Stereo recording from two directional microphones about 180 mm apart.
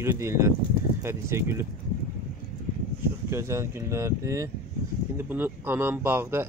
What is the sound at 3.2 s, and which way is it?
Speech, 15° right (ahead or behind).